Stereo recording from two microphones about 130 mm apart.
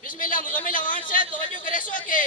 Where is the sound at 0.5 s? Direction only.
90° left.